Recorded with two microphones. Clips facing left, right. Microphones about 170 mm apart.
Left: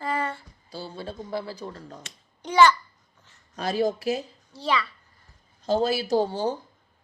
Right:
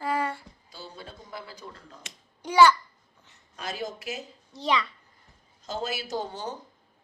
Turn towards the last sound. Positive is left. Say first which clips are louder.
# left 9 dB
turn(degrees=30)  # may be behind; listen again after turning